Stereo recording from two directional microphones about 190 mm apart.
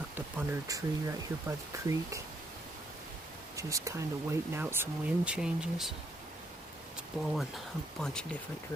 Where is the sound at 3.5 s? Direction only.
15° right (ahead or behind).